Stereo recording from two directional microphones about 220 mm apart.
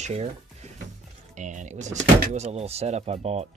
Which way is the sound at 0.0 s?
30° right (ahead or behind).